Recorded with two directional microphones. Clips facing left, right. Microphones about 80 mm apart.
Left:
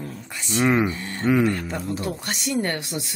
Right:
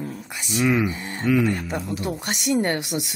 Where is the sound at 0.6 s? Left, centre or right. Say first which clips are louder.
Left 1 dB; left.